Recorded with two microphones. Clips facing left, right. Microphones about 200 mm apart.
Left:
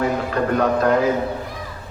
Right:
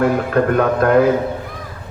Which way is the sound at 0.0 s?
55° right (ahead or behind).